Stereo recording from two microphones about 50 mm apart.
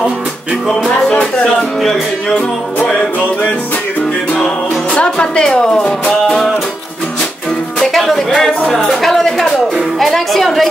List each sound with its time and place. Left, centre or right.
1.1 s speech: left
1.8 s music: centre
4.9 s a woman's voice: centre
7.8 s music: centre
8.6 s speech: centre